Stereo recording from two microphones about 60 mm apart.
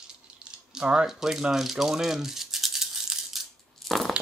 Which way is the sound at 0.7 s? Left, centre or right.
Centre.